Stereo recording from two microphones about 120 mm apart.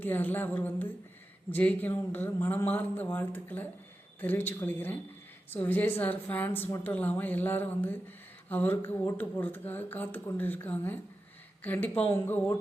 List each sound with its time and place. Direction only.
0.0 s speech: 15° left (ahead or behind)